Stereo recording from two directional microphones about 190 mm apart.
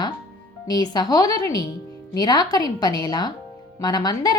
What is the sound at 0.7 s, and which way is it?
A woman's voice, 20° left (ahead or behind).